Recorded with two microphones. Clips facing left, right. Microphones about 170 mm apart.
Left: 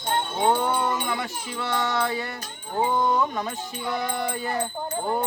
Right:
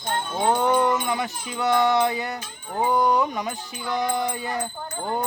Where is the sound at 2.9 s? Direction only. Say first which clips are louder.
Right 4 dB; 15° right (ahead or behind).